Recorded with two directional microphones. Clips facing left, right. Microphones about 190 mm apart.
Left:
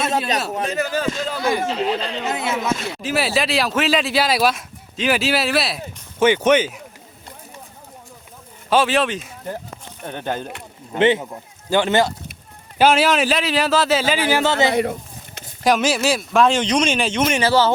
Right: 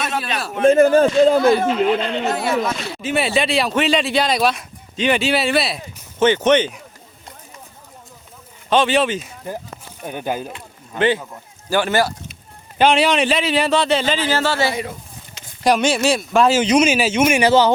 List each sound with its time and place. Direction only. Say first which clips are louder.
0.0 s a sound: left 3 dB; 25° left (ahead or behind)
0.6 s a man's voice: right 10 dB; 50° right (ahead or behind)
1.7 s speech: right 4 dB; 35° left (ahead or behind)
2.4 s speech: right 2 dB; 20° left (ahead or behind)
3.0 s speech: right 4 dB; centre (ahead or behind)
8.7 s speech: right 1 dB; 5° left (ahead or behind)
10.9 s speech: left 2 dB; 20° left (ahead or behind)
12.8 s speech: even; centre (ahead or behind); by 14.7 s 20° left (ahead or behind)
14.7 s a man's voice: left 6 dB; 60° left (ahead or behind)
15.6 s speech: right 1 dB; centre (ahead or behind)